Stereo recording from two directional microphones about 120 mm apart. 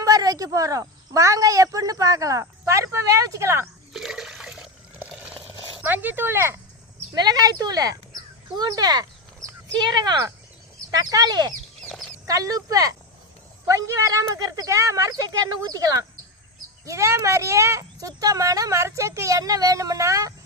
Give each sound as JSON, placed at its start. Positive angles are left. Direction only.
{"t": 0.0, "sound": "speech", "side_deg": -30}
{"t": 3.9, "sound": "toilet flush", "side_deg": 0}
{"t": 5.0, "sound": "a sound", "side_deg": -10}
{"t": 7.1, "sound": "speech", "side_deg": -35}
{"t": 11.9, "sound": "chicken", "side_deg": 5}
{"t": 12.2, "sound": "speech", "side_deg": -30}